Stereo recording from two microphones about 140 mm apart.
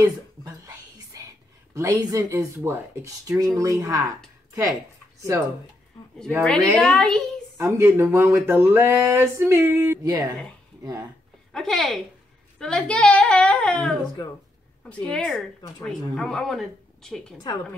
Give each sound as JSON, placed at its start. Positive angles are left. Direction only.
{"t": 0.5, "sound": "whispering", "side_deg": -25}
{"t": 3.5, "sound": "speech", "side_deg": -25}
{"t": 6.4, "sound": "speech", "side_deg": 5}
{"t": 7.5, "sound": "speech", "side_deg": -20}
{"t": 11.5, "sound": "speech", "side_deg": 0}